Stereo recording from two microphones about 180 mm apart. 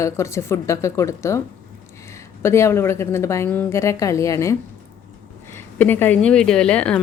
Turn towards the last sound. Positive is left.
turn(degrees=5)  # may be behind; listen again after turning